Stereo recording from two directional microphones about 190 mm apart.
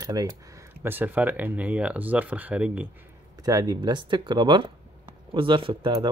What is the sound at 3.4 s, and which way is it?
Speech, 20° right (ahead or behind).